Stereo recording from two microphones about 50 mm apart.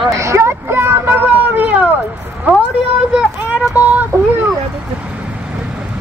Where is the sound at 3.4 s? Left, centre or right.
Right.